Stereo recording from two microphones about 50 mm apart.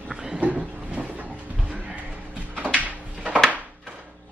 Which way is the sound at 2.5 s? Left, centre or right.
Right.